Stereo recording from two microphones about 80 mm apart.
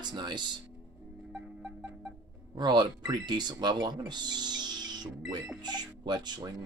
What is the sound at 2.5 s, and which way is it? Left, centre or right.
Speech, right.